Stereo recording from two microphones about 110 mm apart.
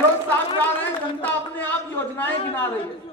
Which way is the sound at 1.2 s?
15° left (ahead or behind).